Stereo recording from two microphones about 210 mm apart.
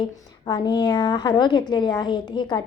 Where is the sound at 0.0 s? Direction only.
20° left (ahead or behind).